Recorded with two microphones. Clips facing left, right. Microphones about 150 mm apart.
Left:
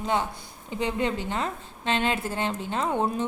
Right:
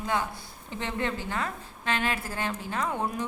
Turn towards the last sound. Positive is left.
turn(degrees=25)  # may be behind; listen again after turning